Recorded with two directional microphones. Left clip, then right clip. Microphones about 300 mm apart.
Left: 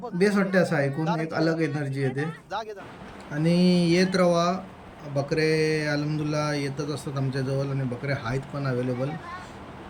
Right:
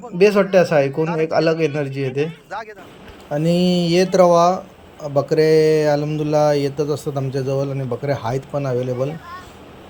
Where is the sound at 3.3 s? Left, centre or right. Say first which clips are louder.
Right 6 dB; centre.